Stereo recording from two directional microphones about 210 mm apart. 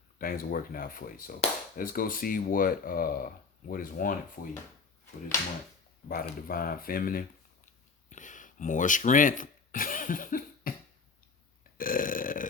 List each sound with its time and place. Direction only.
0.2 s speech: 40° left (ahead or behind)
6.1 s speech: 45° left (ahead or behind)
11.8 s burping: 40° left (ahead or behind)